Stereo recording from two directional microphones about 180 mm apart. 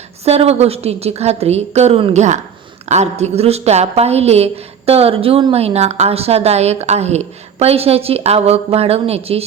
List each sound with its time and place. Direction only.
0.3 s a woman's voice: 35° right (ahead or behind)